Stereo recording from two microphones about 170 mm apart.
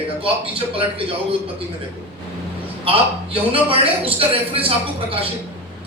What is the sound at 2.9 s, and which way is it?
A man's voice, 35° right (ahead or behind).